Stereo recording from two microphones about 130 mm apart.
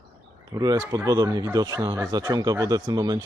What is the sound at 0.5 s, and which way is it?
Speech, 30° right (ahead or behind).